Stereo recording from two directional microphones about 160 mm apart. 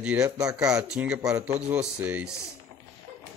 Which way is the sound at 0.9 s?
5° right (ahead or behind).